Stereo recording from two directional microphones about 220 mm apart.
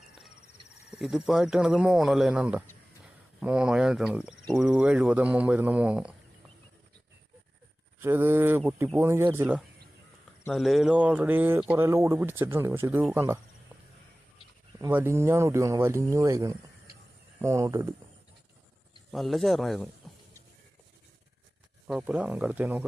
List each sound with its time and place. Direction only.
0.9 s speech: 5° right (ahead or behind)
7.9 s speech: 10° right (ahead or behind)
14.8 s speech: 10° right (ahead or behind)
19.1 s speech: centre (ahead or behind)
21.8 s speech: 5° right (ahead or behind)